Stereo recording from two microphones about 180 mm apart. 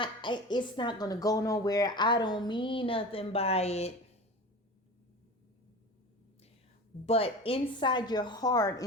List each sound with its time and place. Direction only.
0.0 s a woman's voice: 25° left (ahead or behind)
7.0 s a woman's voice: 35° left (ahead or behind)